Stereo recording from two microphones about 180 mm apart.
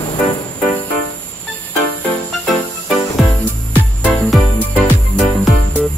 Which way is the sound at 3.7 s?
10° left (ahead or behind).